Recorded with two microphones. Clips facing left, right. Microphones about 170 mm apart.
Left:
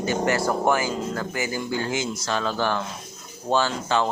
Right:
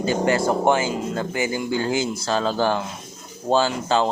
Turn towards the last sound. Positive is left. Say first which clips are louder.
# right 3 dB
turn(degrees=-30)  # may be behind; listen again after turning